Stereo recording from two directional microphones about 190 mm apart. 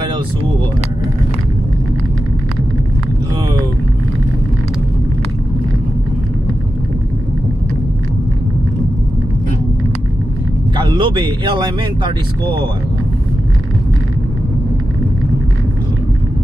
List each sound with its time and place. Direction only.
10.8 s speech: 25° right (ahead or behind)